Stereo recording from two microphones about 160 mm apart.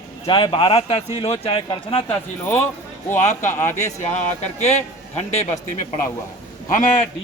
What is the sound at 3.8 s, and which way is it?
A man's voice, 45° left (ahead or behind).